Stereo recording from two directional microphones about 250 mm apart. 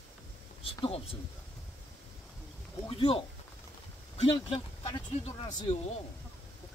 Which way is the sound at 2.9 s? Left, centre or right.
Left.